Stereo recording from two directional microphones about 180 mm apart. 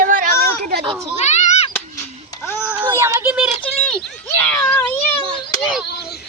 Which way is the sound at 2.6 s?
15° right (ahead or behind).